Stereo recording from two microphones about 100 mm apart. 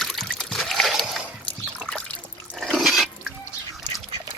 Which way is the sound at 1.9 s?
10° left (ahead or behind).